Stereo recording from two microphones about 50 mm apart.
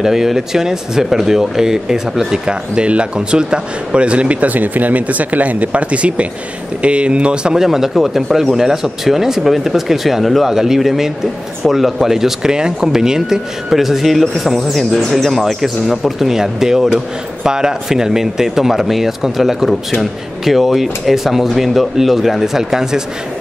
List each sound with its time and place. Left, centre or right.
0.0 s speech: centre
7.5 s speech: centre